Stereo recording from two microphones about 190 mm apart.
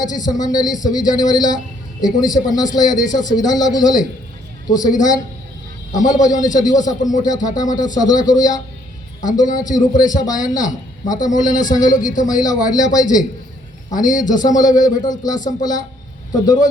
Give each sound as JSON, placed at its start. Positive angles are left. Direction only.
{"t": 0.0, "sound": "speech", "side_deg": 20}
{"t": 6.6, "sound": "speech", "side_deg": 20}